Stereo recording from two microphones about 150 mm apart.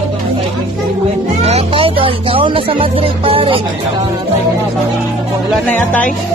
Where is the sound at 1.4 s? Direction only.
45° right (ahead or behind).